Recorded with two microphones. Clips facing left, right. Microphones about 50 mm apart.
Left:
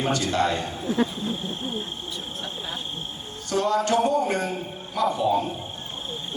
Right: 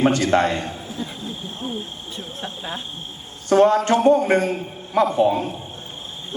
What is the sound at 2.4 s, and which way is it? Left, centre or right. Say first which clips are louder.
Speech: right 4 dB; right.